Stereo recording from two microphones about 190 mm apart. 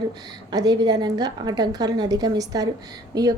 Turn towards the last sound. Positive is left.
turn(degrees=-20)  # may be behind; listen again after turning